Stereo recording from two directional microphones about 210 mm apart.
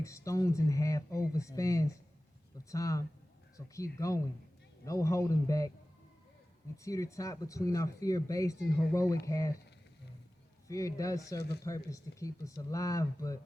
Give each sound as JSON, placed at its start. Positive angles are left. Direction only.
{"t": 0.0, "sound": "speech", "side_deg": 15}
{"t": 6.8, "sound": "speech", "side_deg": 15}
{"t": 10.7, "sound": "speech", "side_deg": 15}